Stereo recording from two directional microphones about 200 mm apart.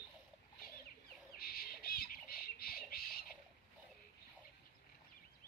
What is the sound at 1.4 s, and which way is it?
Squawk, 50° left (ahead or behind).